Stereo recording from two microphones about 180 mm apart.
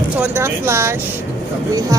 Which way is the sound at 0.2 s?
15° right (ahead or behind).